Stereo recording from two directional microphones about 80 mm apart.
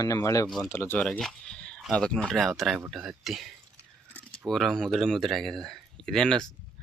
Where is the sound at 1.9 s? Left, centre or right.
Centre.